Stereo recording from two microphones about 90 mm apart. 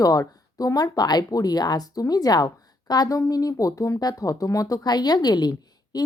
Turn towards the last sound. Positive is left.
turn(degrees=50)  # may be behind; listen again after turning